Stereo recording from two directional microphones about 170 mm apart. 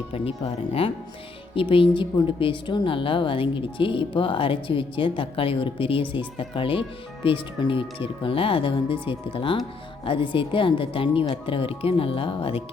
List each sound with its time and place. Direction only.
0.1 s speech: 35° left (ahead or behind)